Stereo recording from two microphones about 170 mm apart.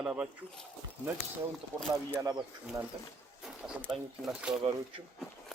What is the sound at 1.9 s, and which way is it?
Speech, 20° right (ahead or behind).